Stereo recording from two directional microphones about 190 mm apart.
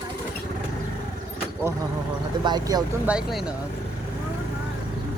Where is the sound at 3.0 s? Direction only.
5° right (ahead or behind).